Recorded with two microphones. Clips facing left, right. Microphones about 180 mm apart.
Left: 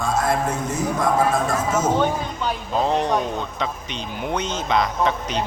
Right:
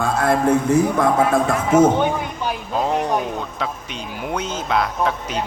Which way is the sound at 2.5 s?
10° right (ahead or behind).